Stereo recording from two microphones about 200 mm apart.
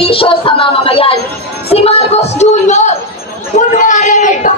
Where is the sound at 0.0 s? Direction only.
25° left (ahead or behind).